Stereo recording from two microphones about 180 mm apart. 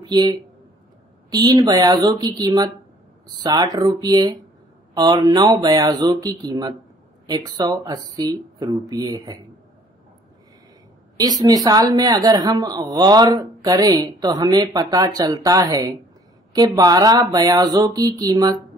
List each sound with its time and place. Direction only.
0.0 s a woman's voice: 25° right (ahead or behind)
11.1 s a woman's voice: 20° right (ahead or behind)